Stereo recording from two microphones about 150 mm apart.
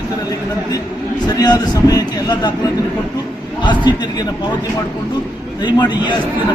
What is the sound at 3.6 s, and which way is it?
Speech, 30° left (ahead or behind).